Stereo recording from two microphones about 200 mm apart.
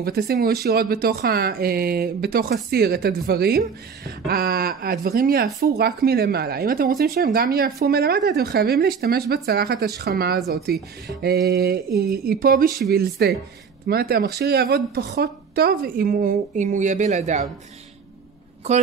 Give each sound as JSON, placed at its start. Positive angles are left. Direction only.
{"t": 0.0, "sound": "speech", "side_deg": -50}